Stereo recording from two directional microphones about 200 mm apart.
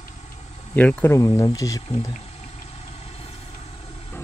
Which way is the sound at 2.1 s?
30° left (ahead or behind).